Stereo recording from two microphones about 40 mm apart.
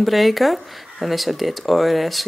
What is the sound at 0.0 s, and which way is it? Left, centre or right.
Speech, centre.